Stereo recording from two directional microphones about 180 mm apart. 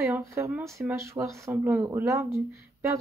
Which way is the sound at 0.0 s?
15° right (ahead or behind).